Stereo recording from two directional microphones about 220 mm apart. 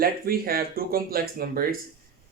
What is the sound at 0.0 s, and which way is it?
Speech, 45° right (ahead or behind).